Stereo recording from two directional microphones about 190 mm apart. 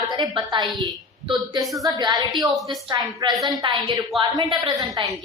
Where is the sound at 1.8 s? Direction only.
20° right (ahead or behind).